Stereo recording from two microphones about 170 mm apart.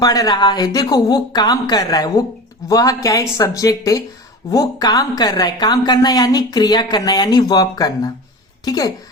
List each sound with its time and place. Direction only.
0.0 s a woman's voice: 20° left (ahead or behind)